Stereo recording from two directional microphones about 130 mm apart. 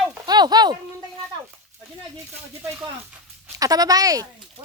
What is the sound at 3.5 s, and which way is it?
Speech, 30° right (ahead or behind).